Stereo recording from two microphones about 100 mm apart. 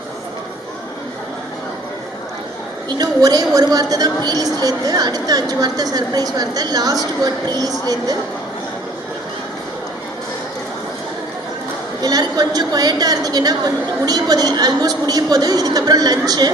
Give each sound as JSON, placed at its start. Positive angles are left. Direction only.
{"t": 3.0, "sound": "a woman's voice", "side_deg": -40}
{"t": 12.0, "sound": "a woman's voice", "side_deg": -40}